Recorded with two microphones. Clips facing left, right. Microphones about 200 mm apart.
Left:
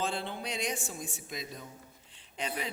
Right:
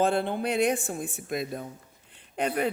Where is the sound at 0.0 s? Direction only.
55° right (ahead or behind).